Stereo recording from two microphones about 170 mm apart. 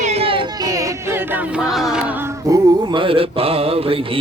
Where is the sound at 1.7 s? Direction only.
Centre (ahead or behind).